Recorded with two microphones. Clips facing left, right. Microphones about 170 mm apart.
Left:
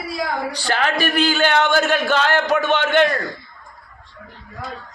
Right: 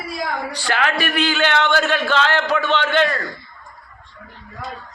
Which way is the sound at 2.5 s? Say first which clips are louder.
Left 2 dB; 45° left (ahead or behind).